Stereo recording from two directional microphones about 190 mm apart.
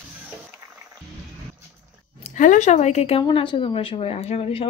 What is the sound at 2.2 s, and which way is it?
Speech, 40° left (ahead or behind).